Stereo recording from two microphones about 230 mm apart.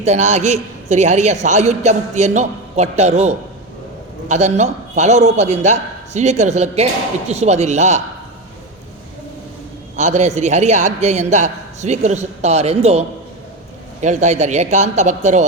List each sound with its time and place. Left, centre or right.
0.0 s a man's voice: right
9.9 s a man's voice: right